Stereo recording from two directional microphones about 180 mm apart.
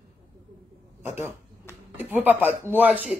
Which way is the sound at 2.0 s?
10° right (ahead or behind).